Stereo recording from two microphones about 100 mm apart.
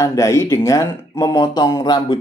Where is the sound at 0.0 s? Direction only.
35° left (ahead or behind).